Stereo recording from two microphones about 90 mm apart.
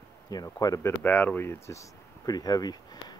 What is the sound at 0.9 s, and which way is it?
Speech, 20° left (ahead or behind).